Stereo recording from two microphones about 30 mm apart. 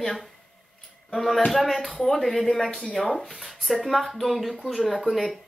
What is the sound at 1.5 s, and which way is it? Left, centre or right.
A woman's voice, centre.